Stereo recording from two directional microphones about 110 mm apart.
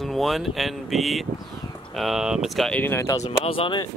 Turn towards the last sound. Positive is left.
turn(degrees=55)  # may be behind; listen again after turning